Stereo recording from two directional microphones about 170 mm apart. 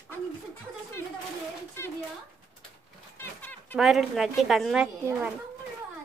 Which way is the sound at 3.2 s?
10° left (ahead or behind).